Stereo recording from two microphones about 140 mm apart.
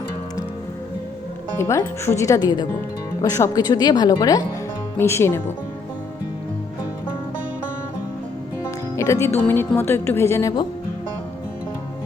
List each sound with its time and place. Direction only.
1.5 s speech: 20° left (ahead or behind)
8.6 s speech: 20° left (ahead or behind)